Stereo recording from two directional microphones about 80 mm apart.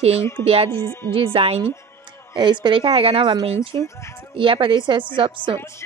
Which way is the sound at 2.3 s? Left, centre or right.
Right.